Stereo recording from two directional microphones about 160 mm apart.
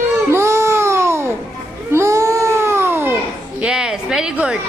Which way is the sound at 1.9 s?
20° right (ahead or behind).